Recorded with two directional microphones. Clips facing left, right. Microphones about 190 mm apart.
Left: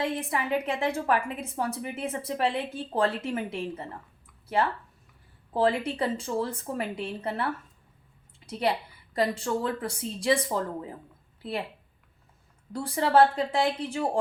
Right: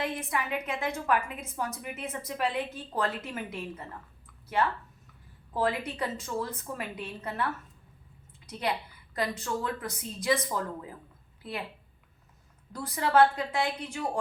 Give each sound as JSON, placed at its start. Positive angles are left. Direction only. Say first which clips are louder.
{"t": 0.0, "sound": "a woman's voice", "louder": "left 3 dB", "side_deg": 30}
{"t": 5.5, "sound": "a woman's voice", "louder": "left 4 dB", "side_deg": 30}
{"t": 12.7, "sound": "a woman's voice", "louder": "left 3 dB", "side_deg": 30}